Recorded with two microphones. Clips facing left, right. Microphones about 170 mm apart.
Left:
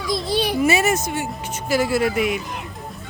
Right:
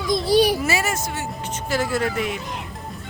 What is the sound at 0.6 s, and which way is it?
A woman's voice, 20° left (ahead or behind).